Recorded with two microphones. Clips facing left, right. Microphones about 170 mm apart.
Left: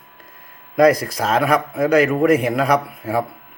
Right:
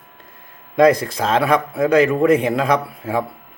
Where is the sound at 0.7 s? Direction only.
30° right (ahead or behind).